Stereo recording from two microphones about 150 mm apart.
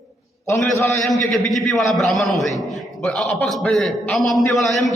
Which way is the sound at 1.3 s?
Centre (ahead or behind).